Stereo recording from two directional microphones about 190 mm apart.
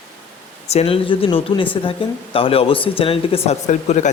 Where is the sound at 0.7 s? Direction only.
30° left (ahead or behind).